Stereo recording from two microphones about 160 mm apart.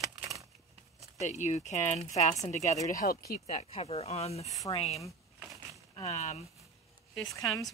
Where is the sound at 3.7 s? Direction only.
35° left (ahead or behind).